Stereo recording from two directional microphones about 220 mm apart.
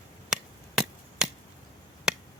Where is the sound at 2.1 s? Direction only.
5° right (ahead or behind).